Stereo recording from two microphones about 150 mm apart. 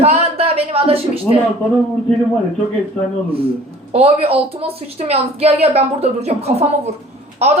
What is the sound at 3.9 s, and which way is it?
A woman's voice, 40° right (ahead or behind).